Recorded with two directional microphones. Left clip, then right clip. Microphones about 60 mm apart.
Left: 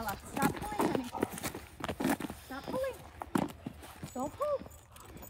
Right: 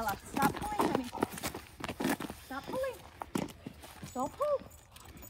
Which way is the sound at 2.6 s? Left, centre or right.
Left.